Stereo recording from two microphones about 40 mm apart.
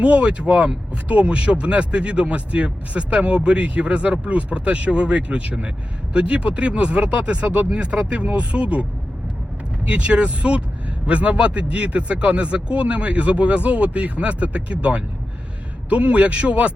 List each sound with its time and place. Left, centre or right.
0.0 s speech: right
7.7 s speech: right